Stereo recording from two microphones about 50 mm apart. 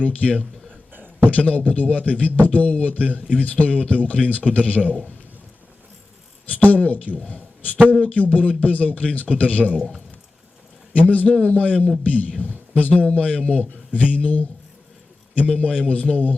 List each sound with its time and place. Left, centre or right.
0.0 s a man's voice: left
6.5 s a man's voice: left
7.3 s a sound: left
8.0 s a man's voice: left
10.9 s a man's voice: left